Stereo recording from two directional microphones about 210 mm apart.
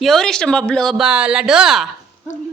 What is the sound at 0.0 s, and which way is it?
Speech, centre (ahead or behind).